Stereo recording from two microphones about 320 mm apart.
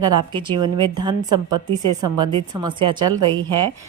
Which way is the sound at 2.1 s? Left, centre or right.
Centre.